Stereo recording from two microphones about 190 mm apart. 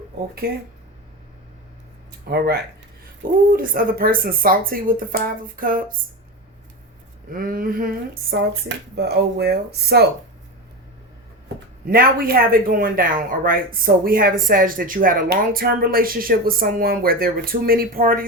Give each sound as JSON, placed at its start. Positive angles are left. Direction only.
{"t": 2.3, "sound": "speech", "side_deg": -55}
{"t": 7.3, "sound": "speech", "side_deg": -50}
{"t": 11.9, "sound": "speech", "side_deg": -50}